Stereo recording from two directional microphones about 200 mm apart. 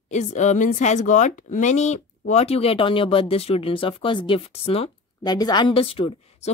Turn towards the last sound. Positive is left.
turn(degrees=30)  # may be behind; listen again after turning